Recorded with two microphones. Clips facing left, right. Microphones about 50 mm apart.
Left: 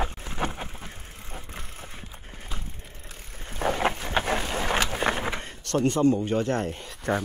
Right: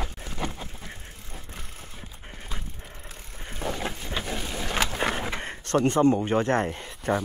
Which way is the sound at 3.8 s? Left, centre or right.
Left.